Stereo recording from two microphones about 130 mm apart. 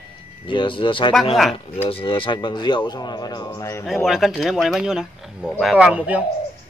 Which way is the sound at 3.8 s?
Centre (ahead or behind).